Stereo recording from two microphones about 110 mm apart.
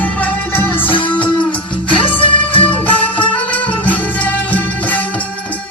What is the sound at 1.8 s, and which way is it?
Music, 10° left (ahead or behind).